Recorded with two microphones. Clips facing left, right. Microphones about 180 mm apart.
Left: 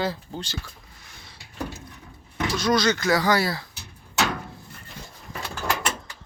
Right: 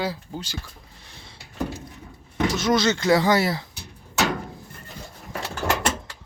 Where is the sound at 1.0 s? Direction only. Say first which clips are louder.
Right 2 dB; 30° right (ahead or behind).